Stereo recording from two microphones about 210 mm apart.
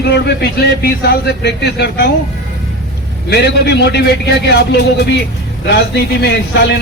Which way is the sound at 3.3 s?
50° left (ahead or behind).